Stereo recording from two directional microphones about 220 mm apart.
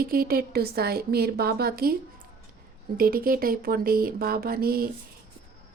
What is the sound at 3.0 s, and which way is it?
Speech, 40° right (ahead or behind).